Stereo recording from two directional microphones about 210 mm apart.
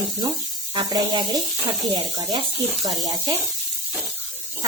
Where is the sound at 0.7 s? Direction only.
20° right (ahead or behind).